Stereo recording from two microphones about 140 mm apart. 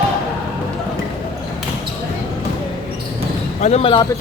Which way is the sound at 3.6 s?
50° left (ahead or behind).